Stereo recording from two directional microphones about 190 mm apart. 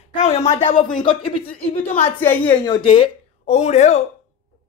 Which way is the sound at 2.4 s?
25° left (ahead or behind).